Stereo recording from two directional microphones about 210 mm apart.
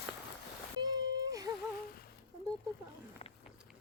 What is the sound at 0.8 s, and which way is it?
Whimper, 20° right (ahead or behind).